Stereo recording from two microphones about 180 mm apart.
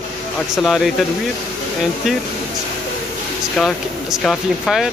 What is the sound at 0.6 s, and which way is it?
Speech, centre (ahead or behind).